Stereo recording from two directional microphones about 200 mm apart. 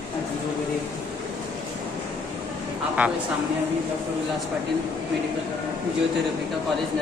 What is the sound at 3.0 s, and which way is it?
Speech, 5° right (ahead or behind).